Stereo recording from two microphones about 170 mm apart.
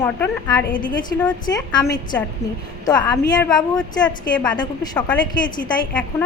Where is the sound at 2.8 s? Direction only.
25° left (ahead or behind).